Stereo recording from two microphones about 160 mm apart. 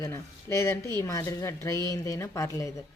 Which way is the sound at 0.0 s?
20° left (ahead or behind).